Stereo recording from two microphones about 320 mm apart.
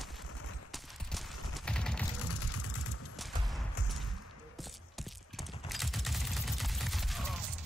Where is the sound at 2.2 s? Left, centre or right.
Left.